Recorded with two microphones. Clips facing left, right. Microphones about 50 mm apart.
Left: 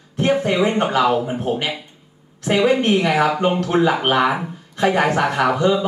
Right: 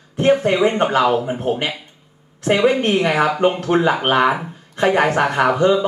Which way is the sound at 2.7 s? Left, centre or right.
Centre.